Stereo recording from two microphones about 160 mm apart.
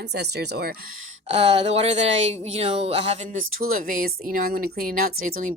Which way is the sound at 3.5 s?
65° right (ahead or behind).